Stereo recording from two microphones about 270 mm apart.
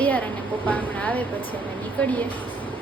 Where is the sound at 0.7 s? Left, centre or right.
Centre.